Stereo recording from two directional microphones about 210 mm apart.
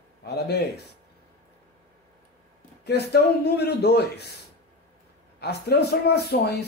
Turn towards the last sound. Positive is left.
turn(degrees=50)  # may be behind; listen again after turning